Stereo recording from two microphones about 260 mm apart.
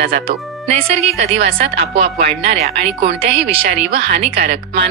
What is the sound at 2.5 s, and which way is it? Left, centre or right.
Speech, right.